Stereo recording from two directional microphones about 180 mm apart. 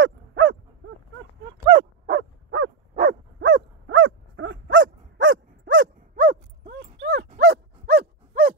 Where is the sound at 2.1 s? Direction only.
90° right.